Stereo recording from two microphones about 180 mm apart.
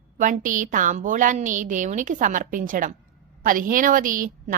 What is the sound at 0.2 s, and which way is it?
A woman's voice, 45° right (ahead or behind).